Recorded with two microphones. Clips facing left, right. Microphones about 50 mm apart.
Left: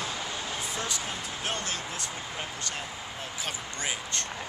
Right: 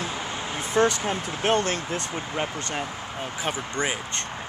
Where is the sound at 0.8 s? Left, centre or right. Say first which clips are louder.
Right 12 dB; right.